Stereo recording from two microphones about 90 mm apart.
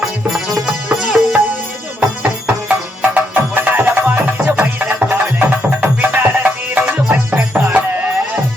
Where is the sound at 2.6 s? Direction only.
20° right (ahead or behind).